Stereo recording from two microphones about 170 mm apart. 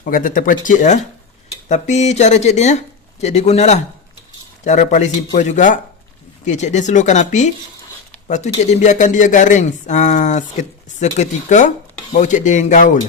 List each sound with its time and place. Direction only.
0.0 s speech: 50° left (ahead or behind)
8.6 s speech: 45° left (ahead or behind)